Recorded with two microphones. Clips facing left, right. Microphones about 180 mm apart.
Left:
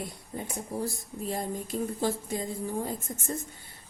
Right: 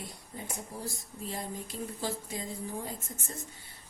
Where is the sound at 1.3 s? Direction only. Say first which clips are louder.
Left 6 dB; 50° left (ahead or behind).